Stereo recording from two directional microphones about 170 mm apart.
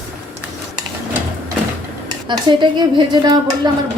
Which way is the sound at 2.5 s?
25° right (ahead or behind).